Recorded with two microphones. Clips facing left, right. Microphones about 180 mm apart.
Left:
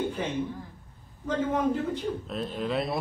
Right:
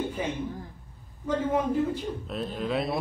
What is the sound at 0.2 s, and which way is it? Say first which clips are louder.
A man's voice: left 1 dB; 10° right (ahead or behind).